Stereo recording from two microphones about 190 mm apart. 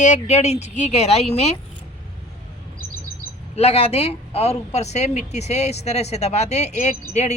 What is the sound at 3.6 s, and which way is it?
Speech, 30° left (ahead or behind).